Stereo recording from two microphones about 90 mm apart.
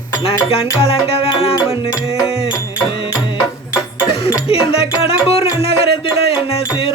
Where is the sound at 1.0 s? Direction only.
90° left.